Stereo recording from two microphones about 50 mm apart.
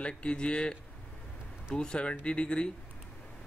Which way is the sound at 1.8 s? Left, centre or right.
Left.